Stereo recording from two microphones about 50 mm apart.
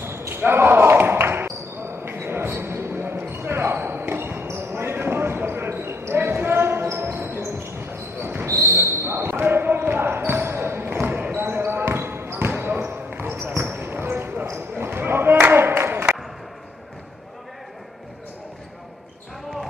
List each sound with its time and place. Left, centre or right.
0.3 s basketball bounce: right